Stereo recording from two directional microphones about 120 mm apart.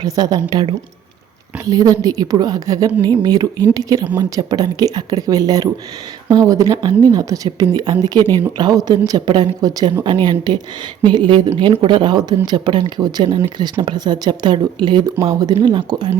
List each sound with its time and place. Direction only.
0.0 s speech: 35° right (ahead or behind)
1.6 s speech: 30° right (ahead or behind)